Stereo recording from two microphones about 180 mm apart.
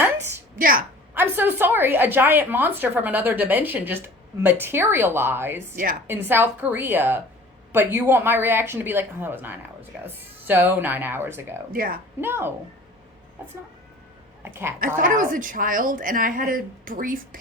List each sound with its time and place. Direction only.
0.0 s a sound: 15° right (ahead or behind)
0.6 s a woman's voice: 50° right (ahead or behind)
1.1 s a woman's voice: 10° right (ahead or behind)
5.7 s a woman's voice: 50° right (ahead or behind)
6.1 s a woman's voice: 10° right (ahead or behind)
11.7 s a woman's voice: 50° right (ahead or behind)
12.2 s a woman's voice: 10° right (ahead or behind)
14.4 s a woman's voice: 15° right (ahead or behind)
14.8 s a woman's voice: 50° right (ahead or behind)